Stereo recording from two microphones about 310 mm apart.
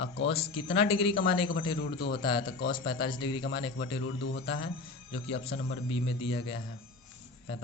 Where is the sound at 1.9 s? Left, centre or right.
Left.